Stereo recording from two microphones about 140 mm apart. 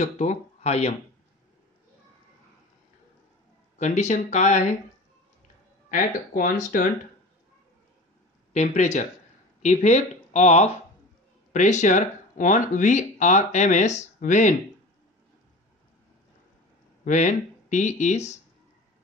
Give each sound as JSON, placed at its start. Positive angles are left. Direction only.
{"t": 0.0, "sound": "speech", "side_deg": 55}
{"t": 3.7, "sound": "speech", "side_deg": 55}
{"t": 5.9, "sound": "speech", "side_deg": 75}
{"t": 8.5, "sound": "speech", "side_deg": 55}
{"t": 17.0, "sound": "speech", "side_deg": 60}